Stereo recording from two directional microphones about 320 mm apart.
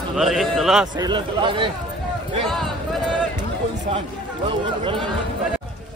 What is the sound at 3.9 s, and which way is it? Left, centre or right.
A man's voice, centre.